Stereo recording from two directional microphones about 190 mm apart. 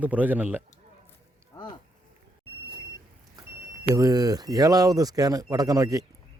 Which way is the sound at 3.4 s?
20° right (ahead or behind).